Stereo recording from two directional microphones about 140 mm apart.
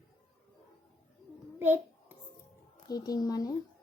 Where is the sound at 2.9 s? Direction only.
25° left (ahead or behind).